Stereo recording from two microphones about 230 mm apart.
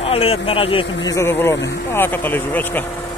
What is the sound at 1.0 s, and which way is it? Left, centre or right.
A man's voice, centre.